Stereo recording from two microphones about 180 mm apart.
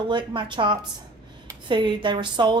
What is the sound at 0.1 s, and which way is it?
A woman's voice, 25° right (ahead or behind).